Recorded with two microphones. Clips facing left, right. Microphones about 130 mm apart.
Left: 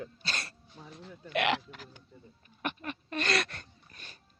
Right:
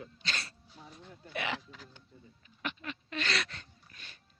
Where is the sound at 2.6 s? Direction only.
50° left (ahead or behind).